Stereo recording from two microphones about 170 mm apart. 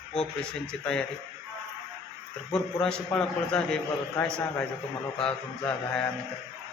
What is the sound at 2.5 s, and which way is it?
A man's voice, 5° left (ahead or behind).